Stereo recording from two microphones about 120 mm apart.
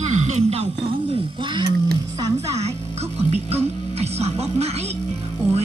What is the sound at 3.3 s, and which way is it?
Speech, 60° right (ahead or behind).